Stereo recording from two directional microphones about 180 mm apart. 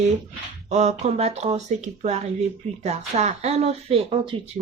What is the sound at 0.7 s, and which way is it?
Speech, 40° right (ahead or behind).